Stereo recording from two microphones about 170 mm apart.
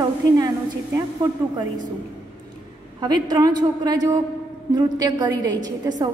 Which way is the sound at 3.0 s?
25° right (ahead or behind).